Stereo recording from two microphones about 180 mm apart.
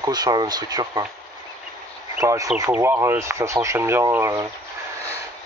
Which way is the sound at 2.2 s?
15° right (ahead or behind).